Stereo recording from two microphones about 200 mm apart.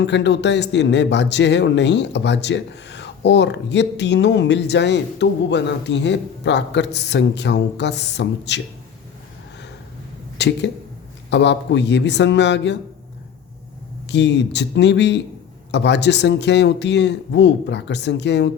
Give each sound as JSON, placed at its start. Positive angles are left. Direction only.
{"t": 0.0, "sound": "speech", "side_deg": 60}
{"t": 10.3, "sound": "speech", "side_deg": 60}
{"t": 14.1, "sound": "speech", "side_deg": 60}